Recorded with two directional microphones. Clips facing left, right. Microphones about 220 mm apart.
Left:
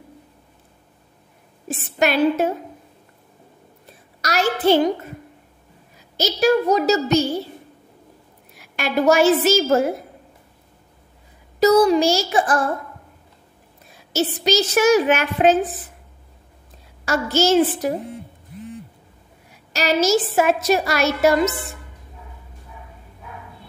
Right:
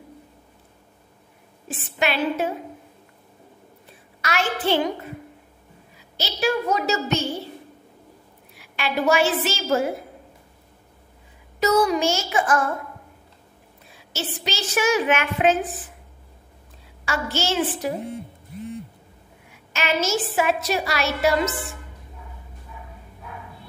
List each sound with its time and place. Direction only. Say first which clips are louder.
2.0 s a woman's voice: left 5 dB; 45° left (ahead or behind)
4.2 s a woman's voice: left 5 dB; 40° left (ahead or behind)
6.1 s a woman's voice: left 7 dB; 40° left (ahead or behind)
8.5 s a woman's voice: left 4 dB; 45° left (ahead or behind)
11.6 s a woman's voice: left 5 dB; 35° left (ahead or behind)
14.1 s a woman's voice: left 10 dB; 40° left (ahead or behind)
17.0 s a woman's voice: left 7 dB; 40° left (ahead or behind)
19.5 s a woman's voice: left 4 dB; 40° left (ahead or behind)